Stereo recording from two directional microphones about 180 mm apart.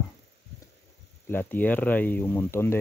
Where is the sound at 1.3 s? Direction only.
10° left (ahead or behind).